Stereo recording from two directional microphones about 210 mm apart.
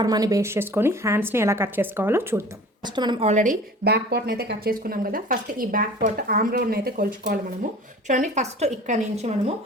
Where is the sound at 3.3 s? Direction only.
40° right (ahead or behind).